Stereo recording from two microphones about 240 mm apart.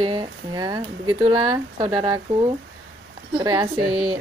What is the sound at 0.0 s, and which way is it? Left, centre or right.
Speech, centre.